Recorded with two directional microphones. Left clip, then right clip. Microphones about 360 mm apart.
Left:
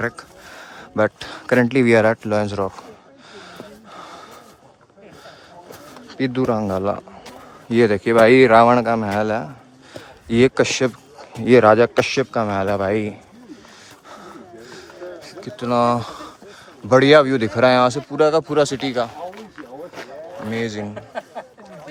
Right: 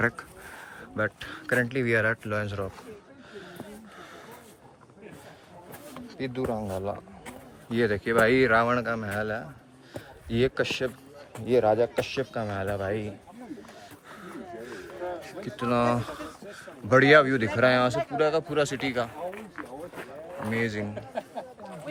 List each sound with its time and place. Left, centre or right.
0.7 s speech: centre
3.9 s gasp: centre
6.1 s pigeon: centre
6.6 s speech: left
7.7 s a man's voice: centre
14.7 s a sound: centre
16.9 s speech: centre
20.5 s a man's voice: centre